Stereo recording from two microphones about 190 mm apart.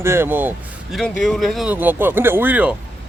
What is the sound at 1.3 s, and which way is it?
Speech, centre (ahead or behind).